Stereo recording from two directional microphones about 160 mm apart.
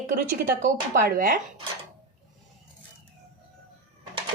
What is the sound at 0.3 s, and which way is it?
A woman's voice, 65° right (ahead or behind).